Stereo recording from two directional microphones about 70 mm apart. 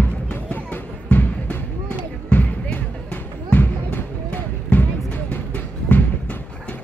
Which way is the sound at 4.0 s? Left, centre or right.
Left.